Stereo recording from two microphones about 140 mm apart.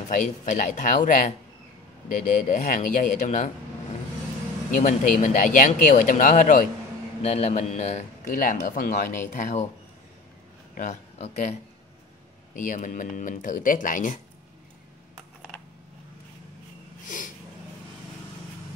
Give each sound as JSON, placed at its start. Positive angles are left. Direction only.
{"t": 0.1, "sound": "a man's voice", "side_deg": 65}
{"t": 4.7, "sound": "speech", "side_deg": 70}
{"t": 7.2, "sound": "a man's voice", "side_deg": 55}
{"t": 9.3, "sound": "a man's voice", "side_deg": 60}
{"t": 10.7, "sound": "a sound", "side_deg": 75}
{"t": 11.1, "sound": "speech", "side_deg": 45}
{"t": 12.5, "sound": "speech", "side_deg": 70}